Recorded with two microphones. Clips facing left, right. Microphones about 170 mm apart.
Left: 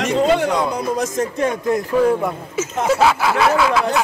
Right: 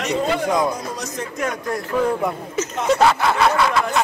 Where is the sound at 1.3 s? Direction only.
25° left (ahead or behind).